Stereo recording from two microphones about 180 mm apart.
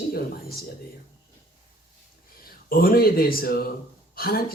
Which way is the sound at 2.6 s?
55° left (ahead or behind).